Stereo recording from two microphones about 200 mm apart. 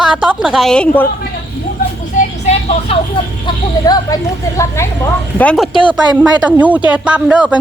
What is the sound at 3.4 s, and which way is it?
Speech, 20° left (ahead or behind).